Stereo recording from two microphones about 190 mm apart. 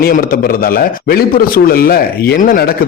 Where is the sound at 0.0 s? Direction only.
50° left (ahead or behind).